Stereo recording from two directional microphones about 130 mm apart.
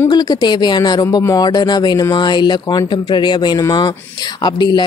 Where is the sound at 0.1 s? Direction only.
30° left (ahead or behind).